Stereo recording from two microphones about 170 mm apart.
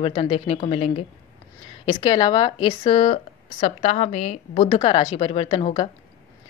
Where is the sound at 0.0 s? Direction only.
35° left (ahead or behind).